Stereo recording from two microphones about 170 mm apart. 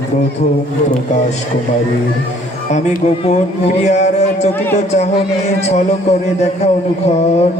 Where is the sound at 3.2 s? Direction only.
40° left (ahead or behind).